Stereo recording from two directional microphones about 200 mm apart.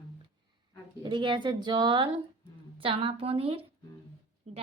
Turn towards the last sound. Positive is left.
turn(degrees=-30)  # may be behind; listen again after turning